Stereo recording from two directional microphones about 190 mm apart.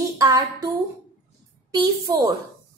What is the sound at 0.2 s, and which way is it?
Speech, 20° right (ahead or behind).